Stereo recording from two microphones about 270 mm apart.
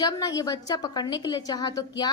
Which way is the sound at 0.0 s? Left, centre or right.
Centre.